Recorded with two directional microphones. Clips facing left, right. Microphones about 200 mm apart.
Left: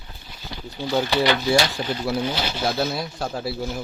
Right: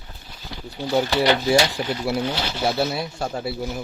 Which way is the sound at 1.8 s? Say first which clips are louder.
Right 1 dB; 10° right (ahead or behind).